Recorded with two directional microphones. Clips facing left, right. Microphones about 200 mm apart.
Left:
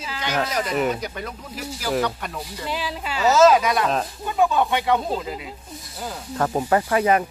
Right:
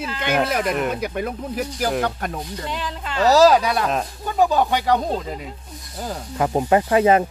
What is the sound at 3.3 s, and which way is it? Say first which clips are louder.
Speech: right 1 dB; 35° right (ahead or behind).